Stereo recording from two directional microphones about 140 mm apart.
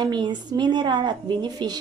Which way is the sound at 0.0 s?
30° right (ahead or behind).